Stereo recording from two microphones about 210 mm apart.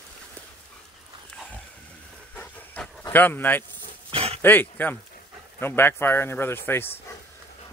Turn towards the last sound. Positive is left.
turn(degrees=10)  # may be behind; listen again after turning